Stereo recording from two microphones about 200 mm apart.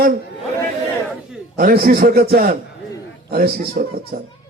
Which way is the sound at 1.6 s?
45° right (ahead or behind).